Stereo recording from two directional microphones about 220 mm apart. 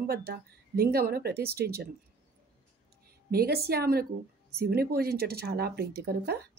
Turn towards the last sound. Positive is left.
turn(degrees=-45)  # may be behind; listen again after turning